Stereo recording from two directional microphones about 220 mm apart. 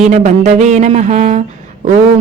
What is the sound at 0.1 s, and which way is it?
Speech, 30° right (ahead or behind).